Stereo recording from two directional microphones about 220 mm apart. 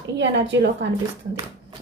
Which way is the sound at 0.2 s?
55° right (ahead or behind).